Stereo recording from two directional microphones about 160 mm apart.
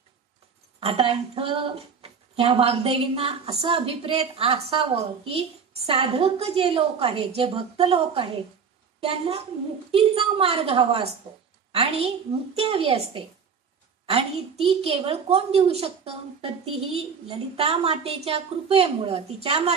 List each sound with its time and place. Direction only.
0.7 s a woman's voice: 35° right (ahead or behind)